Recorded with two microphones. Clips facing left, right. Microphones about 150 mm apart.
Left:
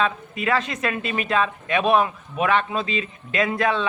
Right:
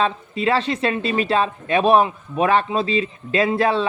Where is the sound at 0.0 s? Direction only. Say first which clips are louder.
Right 3 dB; 30° right (ahead or behind).